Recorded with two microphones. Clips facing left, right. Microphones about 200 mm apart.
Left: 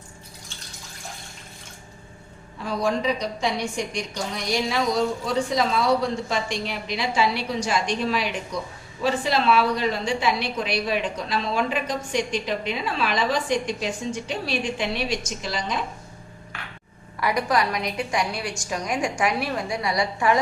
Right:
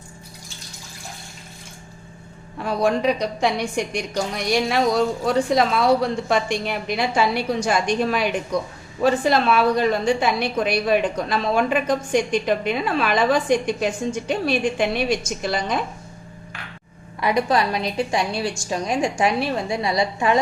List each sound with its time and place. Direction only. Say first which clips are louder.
2.6 s a woman's voice: right 4 dB; 60° right (ahead or behind)
17.2 s a woman's voice: right 3 dB; 25° right (ahead or behind)